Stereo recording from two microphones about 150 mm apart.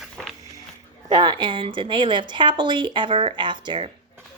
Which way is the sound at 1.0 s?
30° right (ahead or behind).